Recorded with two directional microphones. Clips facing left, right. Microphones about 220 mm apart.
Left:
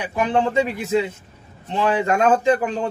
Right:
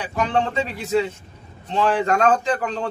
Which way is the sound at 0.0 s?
15° left (ahead or behind).